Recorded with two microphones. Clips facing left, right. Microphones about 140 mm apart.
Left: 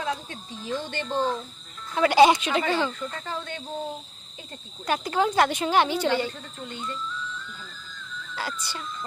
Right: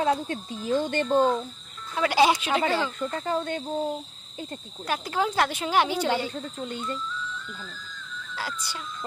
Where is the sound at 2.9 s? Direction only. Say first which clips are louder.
Right 5 dB; 45° right (ahead or behind).